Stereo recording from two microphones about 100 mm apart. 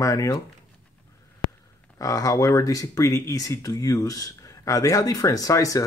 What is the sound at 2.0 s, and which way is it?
Speech, 35° left (ahead or behind).